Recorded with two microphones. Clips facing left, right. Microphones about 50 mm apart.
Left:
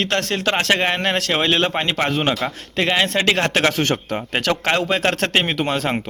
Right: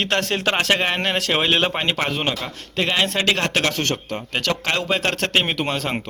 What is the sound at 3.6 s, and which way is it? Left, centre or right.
Speech, centre.